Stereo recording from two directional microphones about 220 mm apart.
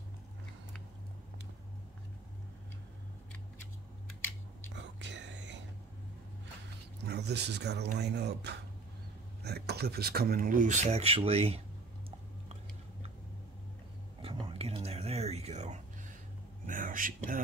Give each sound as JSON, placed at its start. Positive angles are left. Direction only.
{"t": 4.7, "sound": "whispering", "side_deg": -55}
{"t": 7.1, "sound": "speech", "side_deg": -50}
{"t": 14.2, "sound": "a sound", "side_deg": -25}
{"t": 16.6, "sound": "whispering", "side_deg": -40}